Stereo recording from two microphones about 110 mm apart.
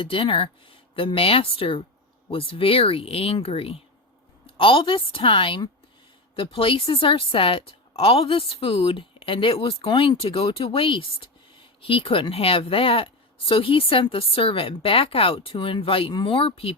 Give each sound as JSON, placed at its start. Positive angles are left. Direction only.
{"t": 0.0, "sound": "a woman's voice", "side_deg": 55}